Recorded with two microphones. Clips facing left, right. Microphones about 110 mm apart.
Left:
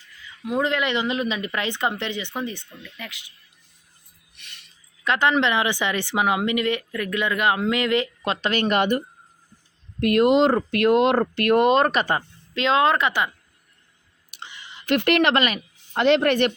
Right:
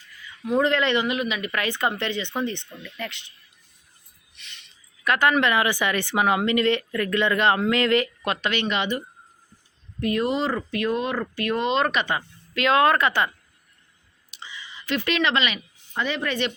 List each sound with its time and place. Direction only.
0.4 s speech: 15° left (ahead or behind)
1.0 s speech: 30° left (ahead or behind)
1.5 s speech: 20° left (ahead or behind)
4.4 s music: 50° left (ahead or behind)
5.0 s speech: 20° left (ahead or behind); by 9.0 s 50° left (ahead or behind)
10.0 s speech: 70° left (ahead or behind)
11.2 s speech: 60° left (ahead or behind); by 12.2 s 40° left (ahead or behind)
12.5 s speech: 20° left (ahead or behind)
14.3 s a sound: 60° left (ahead or behind)
16.0 s speech: 75° left (ahead or behind)